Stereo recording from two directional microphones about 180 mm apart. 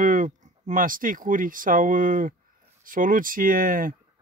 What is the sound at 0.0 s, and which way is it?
Speech, 50° right (ahead or behind).